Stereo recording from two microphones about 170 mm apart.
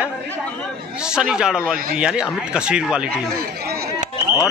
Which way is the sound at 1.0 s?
5° right (ahead or behind).